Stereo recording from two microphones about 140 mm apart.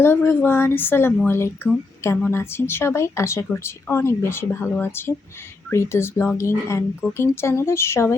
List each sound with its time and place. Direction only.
0.0 s a woman's voice: 15° left (ahead or behind)